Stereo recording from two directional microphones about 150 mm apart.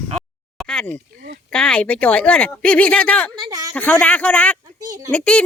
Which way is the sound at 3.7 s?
10° left (ahead or behind).